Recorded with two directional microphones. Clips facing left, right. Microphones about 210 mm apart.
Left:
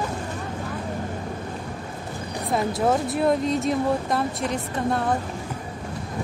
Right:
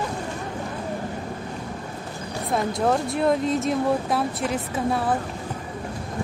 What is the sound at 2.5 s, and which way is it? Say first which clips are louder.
Speech: even; centre (ahead or behind).